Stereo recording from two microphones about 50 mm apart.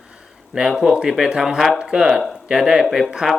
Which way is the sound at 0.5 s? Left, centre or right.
Centre.